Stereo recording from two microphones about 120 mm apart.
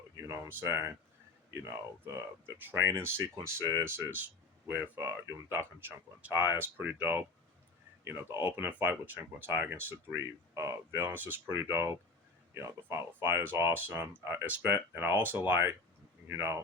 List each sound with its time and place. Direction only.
0.2 s speech: 20° right (ahead or behind)